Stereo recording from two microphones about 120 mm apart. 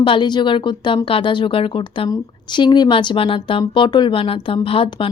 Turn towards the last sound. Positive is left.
turn(degrees=50)  # may be behind; listen again after turning